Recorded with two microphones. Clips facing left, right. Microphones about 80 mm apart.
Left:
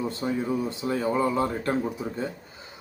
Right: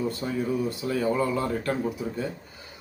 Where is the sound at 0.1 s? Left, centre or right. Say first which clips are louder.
Left 1 dB; left.